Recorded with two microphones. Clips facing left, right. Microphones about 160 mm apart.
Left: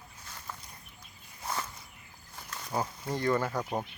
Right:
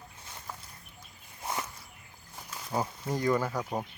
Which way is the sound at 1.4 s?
20° right (ahead or behind).